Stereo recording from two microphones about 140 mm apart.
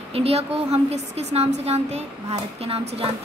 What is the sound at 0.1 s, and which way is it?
A woman's voice, 45° right (ahead or behind).